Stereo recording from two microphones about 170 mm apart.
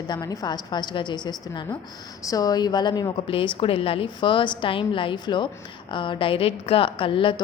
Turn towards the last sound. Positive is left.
turn(degrees=30)  # may be behind; listen again after turning